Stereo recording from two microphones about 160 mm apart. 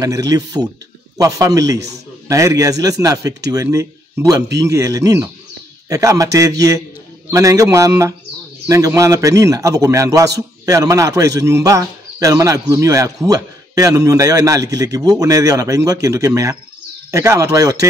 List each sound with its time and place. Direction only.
0.0 s a man's voice: 25° right (ahead or behind)